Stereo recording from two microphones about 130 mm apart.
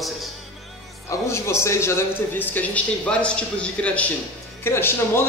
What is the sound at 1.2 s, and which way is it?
A man's voice, 20° left (ahead or behind).